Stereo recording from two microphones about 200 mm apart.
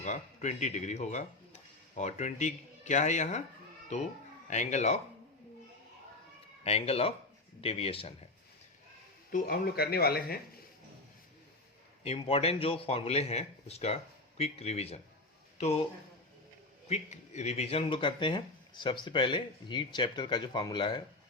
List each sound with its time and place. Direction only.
0.0 s speech: 35° left (ahead or behind)
4.4 s speech: 35° left (ahead or behind)
6.7 s speech: 30° left (ahead or behind)
9.3 s speech: 45° left (ahead or behind)
12.0 s speech: 30° left (ahead or behind)
16.9 s speech: 35° left (ahead or behind)